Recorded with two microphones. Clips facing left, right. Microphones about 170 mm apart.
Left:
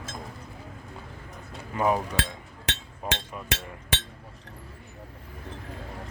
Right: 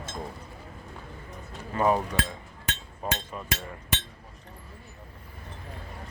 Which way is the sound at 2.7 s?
90° left.